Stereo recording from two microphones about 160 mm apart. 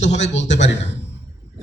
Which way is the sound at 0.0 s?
45° left (ahead or behind).